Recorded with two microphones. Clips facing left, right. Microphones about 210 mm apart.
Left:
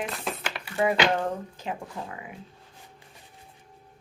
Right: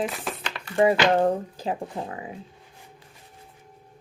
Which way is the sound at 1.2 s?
35° right (ahead or behind).